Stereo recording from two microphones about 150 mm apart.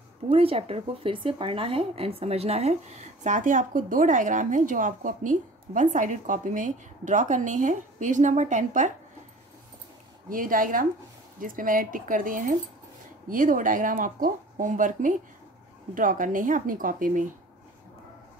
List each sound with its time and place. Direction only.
0.3 s speech: 40° right (ahead or behind)
10.3 s speech: 65° right (ahead or behind)